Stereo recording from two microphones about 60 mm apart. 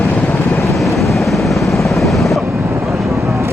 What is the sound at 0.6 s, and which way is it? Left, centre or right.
Vehicle, centre.